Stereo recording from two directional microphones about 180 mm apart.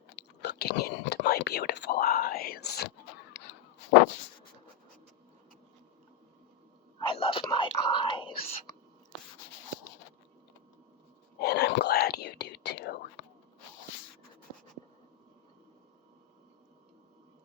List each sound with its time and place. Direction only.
0.2 s whispering: 70° left (ahead or behind)
7.0 s whispering: 30° left (ahead or behind)
11.3 s whispering: 65° left (ahead or behind)